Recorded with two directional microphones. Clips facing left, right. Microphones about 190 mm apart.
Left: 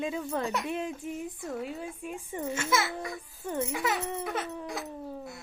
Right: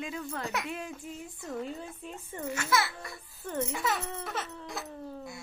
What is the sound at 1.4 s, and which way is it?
A child's voice, 5° left (ahead or behind).